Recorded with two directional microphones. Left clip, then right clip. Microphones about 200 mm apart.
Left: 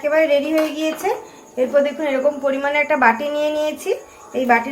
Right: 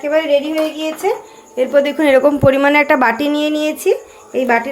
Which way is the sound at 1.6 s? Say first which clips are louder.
Right 3 dB; 40° right (ahead or behind).